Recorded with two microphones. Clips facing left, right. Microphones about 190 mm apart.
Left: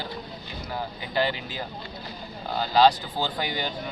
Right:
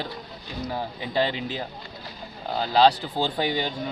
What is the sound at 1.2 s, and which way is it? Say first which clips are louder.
Speech: right 2 dB; 25° right (ahead or behind).